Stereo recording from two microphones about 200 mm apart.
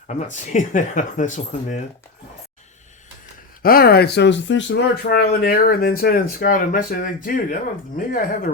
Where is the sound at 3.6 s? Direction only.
50° left (ahead or behind).